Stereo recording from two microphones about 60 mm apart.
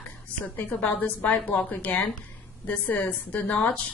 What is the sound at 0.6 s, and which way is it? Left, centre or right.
A woman's voice, left.